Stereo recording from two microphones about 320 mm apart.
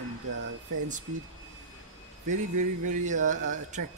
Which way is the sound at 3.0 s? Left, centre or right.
Right.